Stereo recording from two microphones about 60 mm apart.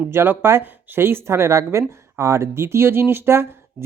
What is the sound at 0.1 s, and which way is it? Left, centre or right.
Speech, right.